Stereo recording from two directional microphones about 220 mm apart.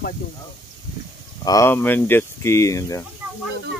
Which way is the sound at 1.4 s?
15° left (ahead or behind).